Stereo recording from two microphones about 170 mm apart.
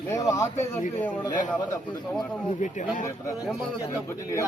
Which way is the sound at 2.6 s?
50° left (ahead or behind).